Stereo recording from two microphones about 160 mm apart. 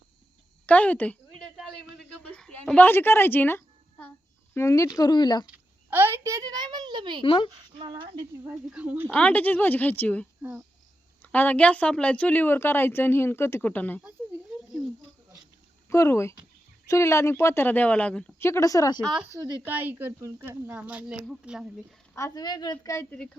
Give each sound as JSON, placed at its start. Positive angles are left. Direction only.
{"t": 0.7, "sound": "speech", "side_deg": 10}
{"t": 1.5, "sound": "a sound", "side_deg": 0}
{"t": 4.5, "sound": "speech", "side_deg": 20}
{"t": 5.5, "sound": "a sound", "side_deg": -15}
{"t": 7.2, "sound": "speech", "side_deg": 30}
{"t": 7.8, "sound": "speech", "side_deg": -35}
{"t": 8.7, "sound": "speech", "side_deg": -10}
{"t": 9.1, "sound": "speech", "side_deg": 10}
{"t": 10.4, "sound": "speech", "side_deg": -5}
{"t": 11.2, "sound": "speech", "side_deg": 10}
{"t": 15.9, "sound": "speech", "side_deg": 15}
{"t": 19.0, "sound": "speech", "side_deg": 0}
{"t": 22.1, "sound": "speech", "side_deg": 20}